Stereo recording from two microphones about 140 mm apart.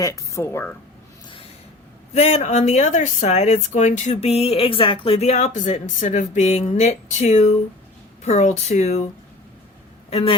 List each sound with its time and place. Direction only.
0.0 s a woman's voice: 20° left (ahead or behind)
2.1 s speech: 50° left (ahead or behind)
10.1 s a man's voice: 45° left (ahead or behind)